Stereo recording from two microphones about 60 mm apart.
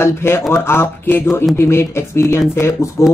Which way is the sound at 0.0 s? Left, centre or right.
Left.